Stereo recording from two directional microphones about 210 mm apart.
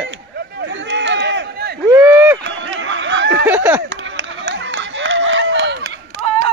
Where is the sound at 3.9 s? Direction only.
60° right (ahead or behind).